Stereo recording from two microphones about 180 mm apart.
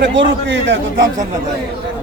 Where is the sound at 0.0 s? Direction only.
90° right.